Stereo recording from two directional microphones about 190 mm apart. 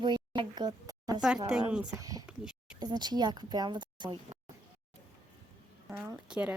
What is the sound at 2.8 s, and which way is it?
A woman's voice, 20° right (ahead or behind).